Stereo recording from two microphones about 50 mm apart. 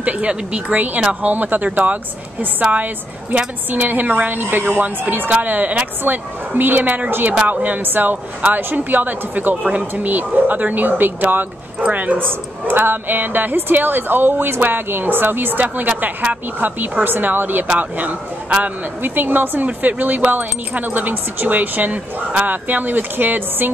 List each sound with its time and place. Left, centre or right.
0.0 s speech: right
1.2 s speech: right
4.4 s speech: right
12.3 s speech: right